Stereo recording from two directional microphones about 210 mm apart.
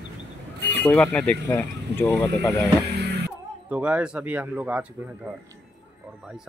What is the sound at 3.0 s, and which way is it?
Music, 50° right (ahead or behind).